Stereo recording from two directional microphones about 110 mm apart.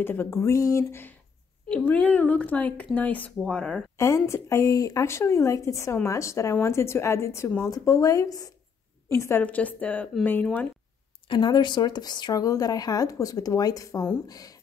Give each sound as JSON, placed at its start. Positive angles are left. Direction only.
{"t": 0.0, "sound": "speech", "side_deg": 20}
{"t": 4.0, "sound": "speech", "side_deg": 25}
{"t": 9.4, "sound": "speech", "side_deg": 15}
{"t": 11.2, "sound": "speech", "side_deg": 45}